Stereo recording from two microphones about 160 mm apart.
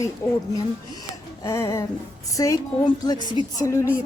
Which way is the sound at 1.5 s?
20° left (ahead or behind).